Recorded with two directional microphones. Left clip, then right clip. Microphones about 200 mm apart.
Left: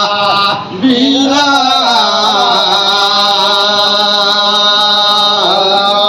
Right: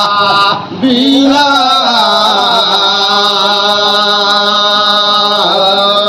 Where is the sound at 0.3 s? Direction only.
60° right (ahead or behind).